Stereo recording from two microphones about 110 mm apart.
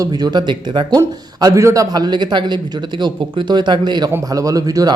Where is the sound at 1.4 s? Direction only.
30° right (ahead or behind).